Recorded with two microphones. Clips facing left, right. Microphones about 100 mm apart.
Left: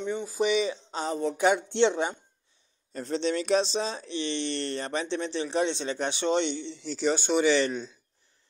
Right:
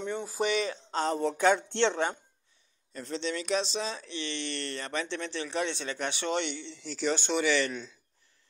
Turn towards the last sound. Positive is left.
turn(degrees=25)  # may be behind; listen again after turning